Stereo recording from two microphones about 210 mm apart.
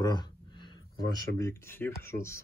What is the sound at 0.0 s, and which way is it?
Speech, 20° left (ahead or behind).